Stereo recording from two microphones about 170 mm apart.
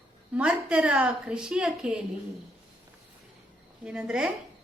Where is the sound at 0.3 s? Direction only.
5° right (ahead or behind).